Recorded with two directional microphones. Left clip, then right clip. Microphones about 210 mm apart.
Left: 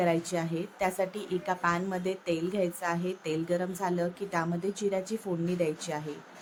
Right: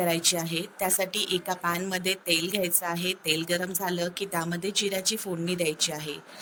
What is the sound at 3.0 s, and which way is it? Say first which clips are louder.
Speech: right 4 dB; 50° right (ahead or behind).